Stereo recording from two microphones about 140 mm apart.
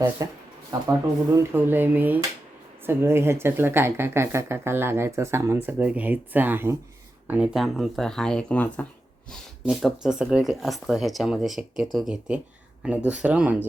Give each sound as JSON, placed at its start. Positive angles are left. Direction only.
{"t": 0.2, "sound": "speech", "side_deg": -25}
{"t": 9.6, "sound": "speech", "side_deg": 0}